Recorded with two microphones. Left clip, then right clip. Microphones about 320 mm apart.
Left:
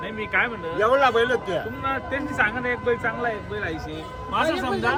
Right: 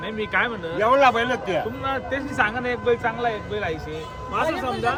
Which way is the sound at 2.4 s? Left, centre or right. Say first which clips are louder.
Right 1 dB; right.